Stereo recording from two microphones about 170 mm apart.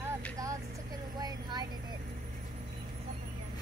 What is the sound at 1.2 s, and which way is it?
Vehicle, 25° right (ahead or behind).